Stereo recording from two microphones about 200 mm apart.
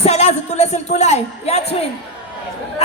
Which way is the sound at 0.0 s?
30° left (ahead or behind).